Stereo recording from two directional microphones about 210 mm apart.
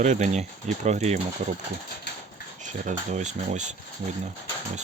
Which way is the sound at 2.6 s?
35° right (ahead or behind).